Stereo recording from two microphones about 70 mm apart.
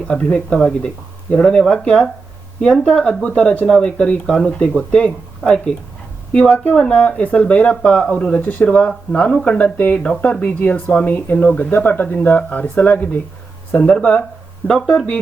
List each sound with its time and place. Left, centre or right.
0.1 s speech: centre
4.3 s speech: centre